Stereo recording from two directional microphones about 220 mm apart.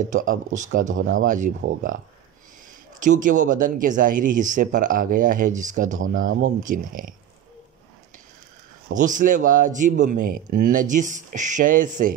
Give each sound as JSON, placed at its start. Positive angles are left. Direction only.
{"t": 0.0, "sound": "speech", "side_deg": -35}
{"t": 3.0, "sound": "speech", "side_deg": -35}
{"t": 8.9, "sound": "speech", "side_deg": -35}